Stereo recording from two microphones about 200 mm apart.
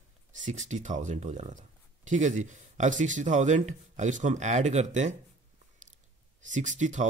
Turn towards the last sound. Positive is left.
turn(degrees=-40)  # may be behind; listen again after turning